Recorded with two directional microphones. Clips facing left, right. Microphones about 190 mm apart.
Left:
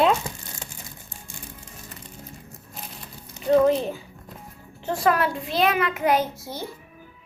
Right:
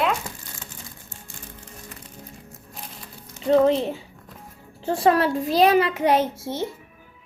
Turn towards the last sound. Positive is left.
turn(degrees=-25)  # may be behind; listen again after turning